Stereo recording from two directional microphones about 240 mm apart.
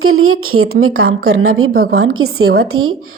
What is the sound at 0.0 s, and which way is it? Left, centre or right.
Speech, right.